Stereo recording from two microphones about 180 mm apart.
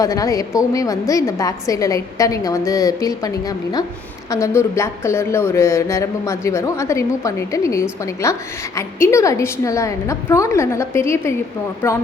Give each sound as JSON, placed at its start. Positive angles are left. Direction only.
{"t": 0.0, "sound": "a woman's voice", "side_deg": 20}